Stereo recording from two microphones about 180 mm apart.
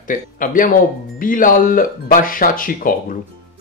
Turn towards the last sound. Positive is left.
turn(degrees=50)  # may be behind; listen again after turning